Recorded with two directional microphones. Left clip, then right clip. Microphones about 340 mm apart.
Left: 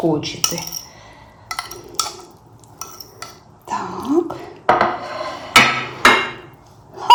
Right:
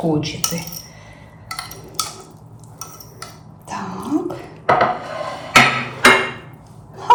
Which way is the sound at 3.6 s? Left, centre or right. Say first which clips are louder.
Left 4 dB; centre.